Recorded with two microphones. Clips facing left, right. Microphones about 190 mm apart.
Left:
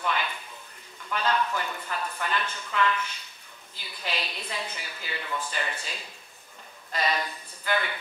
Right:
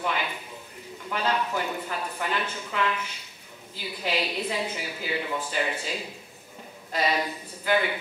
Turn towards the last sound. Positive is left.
turn(degrees=-10)  # may be behind; listen again after turning